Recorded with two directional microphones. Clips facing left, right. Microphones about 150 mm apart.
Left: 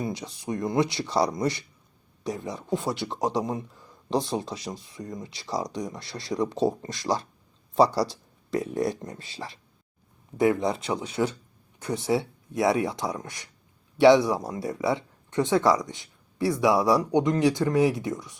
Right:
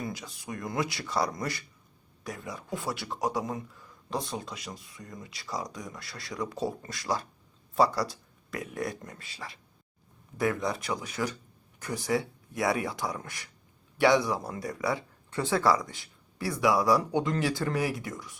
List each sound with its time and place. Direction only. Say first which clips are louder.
0.0 s speech: left 6 dB; 25° left (ahead or behind)